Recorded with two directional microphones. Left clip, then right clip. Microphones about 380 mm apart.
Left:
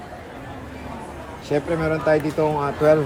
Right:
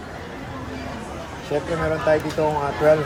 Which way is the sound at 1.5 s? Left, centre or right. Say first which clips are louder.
Left 2 dB; left.